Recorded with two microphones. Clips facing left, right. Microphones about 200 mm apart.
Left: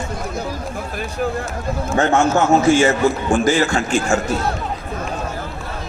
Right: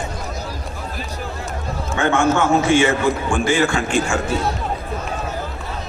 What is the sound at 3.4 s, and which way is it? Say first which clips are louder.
Speech: right 1 dB; 40° left (ahead or behind).